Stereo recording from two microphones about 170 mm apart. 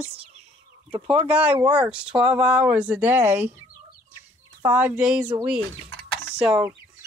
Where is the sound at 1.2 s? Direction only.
5° right (ahead or behind).